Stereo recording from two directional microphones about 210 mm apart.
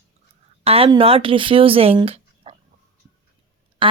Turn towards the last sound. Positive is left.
turn(degrees=-25)  # may be behind; listen again after turning